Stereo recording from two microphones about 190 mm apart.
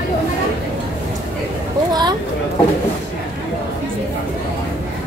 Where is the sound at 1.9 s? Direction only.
20° right (ahead or behind).